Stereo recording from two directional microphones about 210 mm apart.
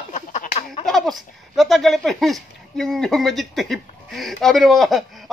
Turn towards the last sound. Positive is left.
turn(degrees=0)  # may be behind; listen again after turning